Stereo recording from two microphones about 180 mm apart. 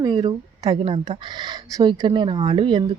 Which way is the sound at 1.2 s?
25° right (ahead or behind).